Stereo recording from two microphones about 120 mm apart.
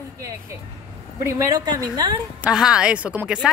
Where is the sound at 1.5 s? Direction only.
30° right (ahead or behind).